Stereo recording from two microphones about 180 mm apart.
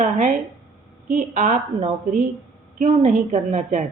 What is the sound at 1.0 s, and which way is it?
A woman's voice, 45° right (ahead or behind).